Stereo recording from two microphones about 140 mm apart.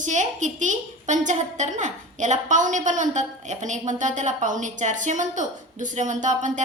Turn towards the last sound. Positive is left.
turn(degrees=-60)  # may be behind; listen again after turning